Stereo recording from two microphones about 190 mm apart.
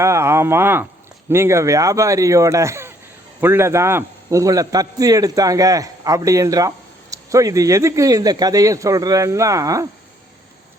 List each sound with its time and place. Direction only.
0.0 s a man's voice: 15° right (ahead or behind)